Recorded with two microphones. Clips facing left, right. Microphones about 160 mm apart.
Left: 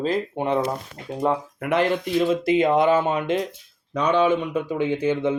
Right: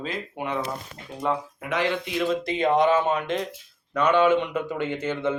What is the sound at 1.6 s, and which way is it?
Speech, 60° left (ahead or behind).